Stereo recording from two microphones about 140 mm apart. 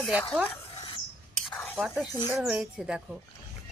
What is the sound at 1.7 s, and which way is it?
Speech, centre (ahead or behind).